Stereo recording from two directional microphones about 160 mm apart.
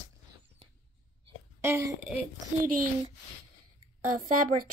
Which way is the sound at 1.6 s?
15° right (ahead or behind).